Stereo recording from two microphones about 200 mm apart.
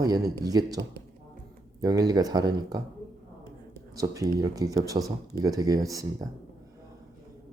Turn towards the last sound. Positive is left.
turn(degrees=-15)  # may be behind; listen again after turning